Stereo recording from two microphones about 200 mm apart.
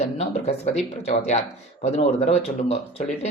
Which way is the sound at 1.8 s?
35° left (ahead or behind).